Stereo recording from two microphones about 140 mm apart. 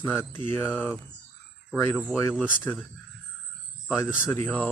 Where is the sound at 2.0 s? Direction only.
5° right (ahead or behind).